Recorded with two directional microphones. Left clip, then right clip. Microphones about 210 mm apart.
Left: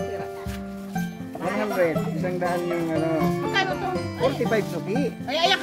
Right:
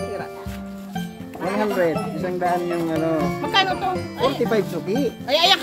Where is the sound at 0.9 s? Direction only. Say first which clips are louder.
Right 1 dB; centre (ahead or behind).